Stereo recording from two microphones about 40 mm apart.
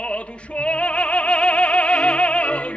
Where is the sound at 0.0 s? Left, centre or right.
Left.